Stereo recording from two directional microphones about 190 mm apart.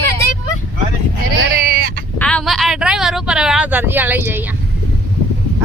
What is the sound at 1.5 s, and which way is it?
Sheep, 50° right (ahead or behind).